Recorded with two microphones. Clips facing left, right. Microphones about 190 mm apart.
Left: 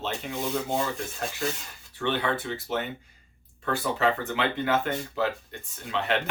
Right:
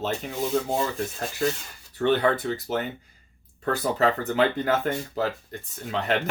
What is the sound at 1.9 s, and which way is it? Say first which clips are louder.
Speech: right 6 dB; 40° right (ahead or behind).